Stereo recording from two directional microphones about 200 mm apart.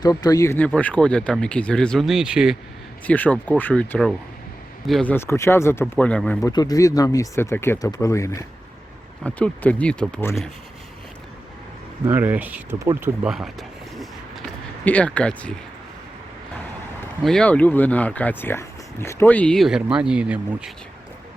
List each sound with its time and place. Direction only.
0.0 s speech: 20° left (ahead or behind); by 2.6 s 5° right (ahead or behind)
3.1 s speech: 5° left (ahead or behind)
6.4 s speech: 20° left (ahead or behind)
12.0 s speech: 10° right (ahead or behind)
13.3 s a sound: centre (ahead or behind)
17.2 s speech: 5° left (ahead or behind)